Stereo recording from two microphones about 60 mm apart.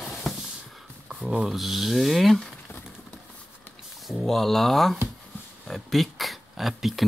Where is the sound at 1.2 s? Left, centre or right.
Centre.